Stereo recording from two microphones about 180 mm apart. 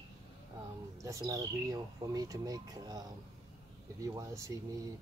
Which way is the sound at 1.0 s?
20° right (ahead or behind).